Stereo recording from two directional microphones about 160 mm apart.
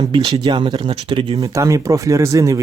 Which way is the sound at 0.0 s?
35° right (ahead or behind).